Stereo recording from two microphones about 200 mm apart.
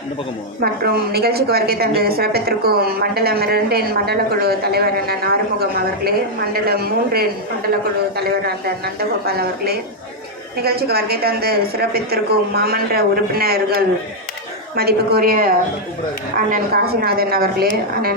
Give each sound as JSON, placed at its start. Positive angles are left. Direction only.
{"t": 0.6, "sound": "a woman's voice", "side_deg": -50}